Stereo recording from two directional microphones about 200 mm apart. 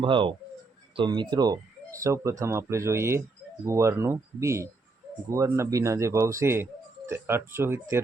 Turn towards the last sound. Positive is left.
turn(degrees=-10)  # may be behind; listen again after turning